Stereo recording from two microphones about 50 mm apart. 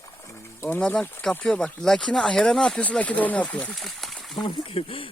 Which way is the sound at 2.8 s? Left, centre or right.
Left.